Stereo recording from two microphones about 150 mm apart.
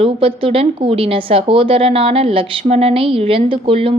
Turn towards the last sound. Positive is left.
turn(degrees=-35)  # may be behind; listen again after turning